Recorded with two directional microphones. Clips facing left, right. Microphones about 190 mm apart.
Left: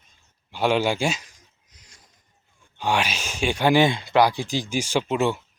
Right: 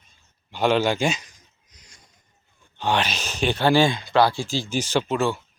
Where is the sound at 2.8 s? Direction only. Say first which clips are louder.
Right 1 dB; 10° left (ahead or behind).